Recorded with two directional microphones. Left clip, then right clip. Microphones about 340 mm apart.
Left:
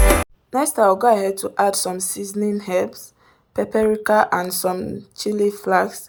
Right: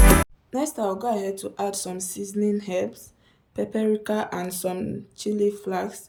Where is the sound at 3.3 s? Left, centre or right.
Left.